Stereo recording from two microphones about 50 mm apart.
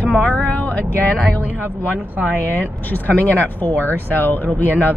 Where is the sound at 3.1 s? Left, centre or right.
Left.